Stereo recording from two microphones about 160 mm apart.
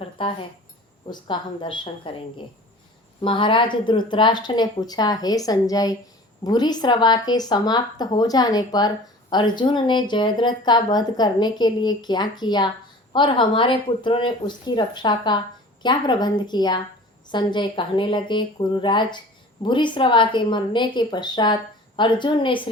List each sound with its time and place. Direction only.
0.0 s keys jangling: 35° left (ahead or behind)
1.0 s a woman's voice: 30° left (ahead or behind)
3.2 s speech: 30° left (ahead or behind)